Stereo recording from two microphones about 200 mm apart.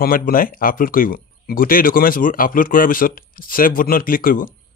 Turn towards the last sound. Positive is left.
turn(degrees=45)  # may be behind; listen again after turning